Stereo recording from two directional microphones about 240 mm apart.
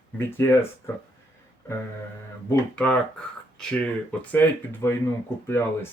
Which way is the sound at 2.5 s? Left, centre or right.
Centre.